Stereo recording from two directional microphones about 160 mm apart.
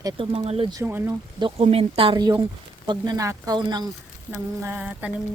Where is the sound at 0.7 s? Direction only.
15° right (ahead or behind).